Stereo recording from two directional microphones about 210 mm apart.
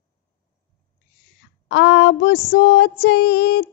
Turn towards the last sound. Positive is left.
turn(degrees=50)  # may be behind; listen again after turning